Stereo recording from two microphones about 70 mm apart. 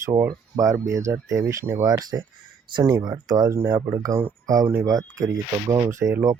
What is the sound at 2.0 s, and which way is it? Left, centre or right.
Speech, right.